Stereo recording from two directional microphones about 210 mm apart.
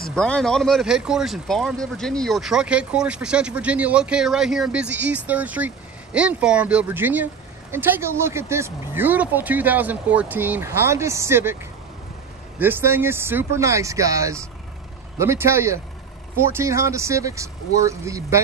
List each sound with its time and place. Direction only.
0.1 s speech: 5° left (ahead or behind); by 11.5 s 10° right (ahead or behind)
12.5 s speech: 10° right (ahead or behind)